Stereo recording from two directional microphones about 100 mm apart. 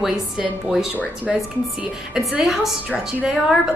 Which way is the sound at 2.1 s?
5° right (ahead or behind).